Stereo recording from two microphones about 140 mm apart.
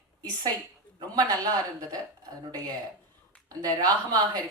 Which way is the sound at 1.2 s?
25° right (ahead or behind).